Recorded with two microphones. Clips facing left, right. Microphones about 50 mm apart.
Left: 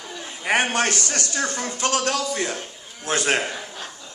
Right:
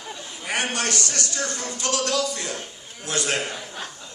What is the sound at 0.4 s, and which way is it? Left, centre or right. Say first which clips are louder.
A man's voice: left 5 dB; left.